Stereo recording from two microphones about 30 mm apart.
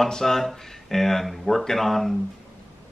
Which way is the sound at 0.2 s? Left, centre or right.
Centre.